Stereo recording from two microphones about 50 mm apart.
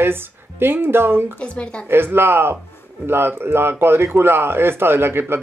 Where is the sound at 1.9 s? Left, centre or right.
Right.